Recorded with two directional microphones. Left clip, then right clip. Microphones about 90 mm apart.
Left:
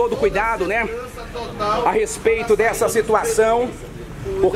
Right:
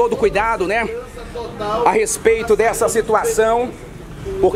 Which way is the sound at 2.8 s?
15° right (ahead or behind).